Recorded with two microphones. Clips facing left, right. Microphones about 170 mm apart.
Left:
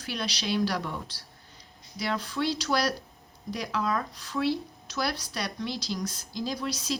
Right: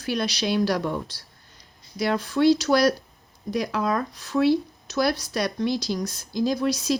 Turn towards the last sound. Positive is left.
turn(degrees=-45)  # may be behind; listen again after turning